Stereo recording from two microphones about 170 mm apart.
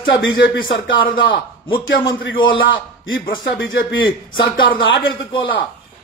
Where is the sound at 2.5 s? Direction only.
90° left.